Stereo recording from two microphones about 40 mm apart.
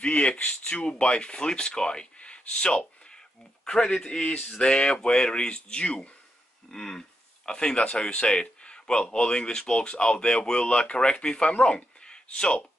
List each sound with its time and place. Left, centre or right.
0.0 s speech: left
0.7 s speech: left